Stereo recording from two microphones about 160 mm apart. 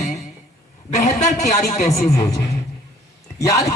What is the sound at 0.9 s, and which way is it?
A man's voice, 45° left (ahead or behind).